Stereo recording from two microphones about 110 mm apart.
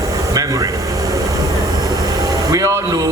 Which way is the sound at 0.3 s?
30° right (ahead or behind).